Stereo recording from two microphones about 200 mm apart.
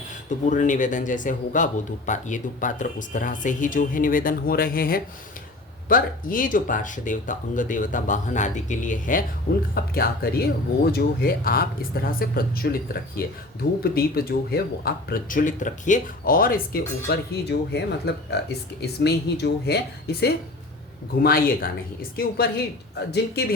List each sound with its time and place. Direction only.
0.3 s speech: 40° left (ahead or behind); by 23.6 s 55° left (ahead or behind)